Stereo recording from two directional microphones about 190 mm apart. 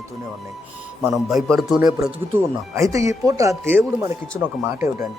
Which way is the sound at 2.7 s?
15° right (ahead or behind).